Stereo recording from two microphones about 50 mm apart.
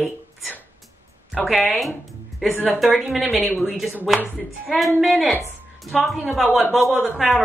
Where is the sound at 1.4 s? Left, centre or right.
Centre.